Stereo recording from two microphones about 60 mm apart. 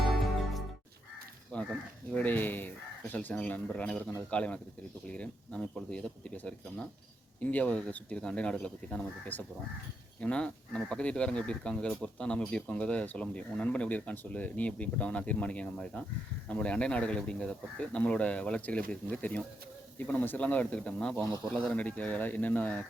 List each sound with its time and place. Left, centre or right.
1.5 s speech: left